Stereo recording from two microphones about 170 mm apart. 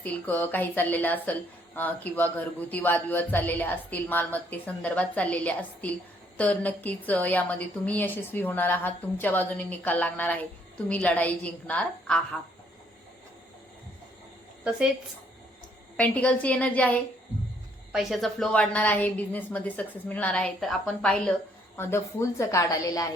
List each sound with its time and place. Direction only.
0.0 s a woman's voice: 10° left (ahead or behind)
16.0 s a woman's voice: 10° left (ahead or behind)